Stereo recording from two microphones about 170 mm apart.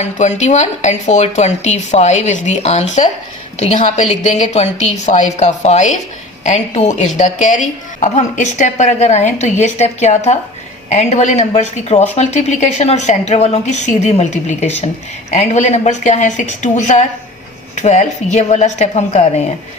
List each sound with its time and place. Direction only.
0.0 s a woman's voice: 45° left (ahead or behind)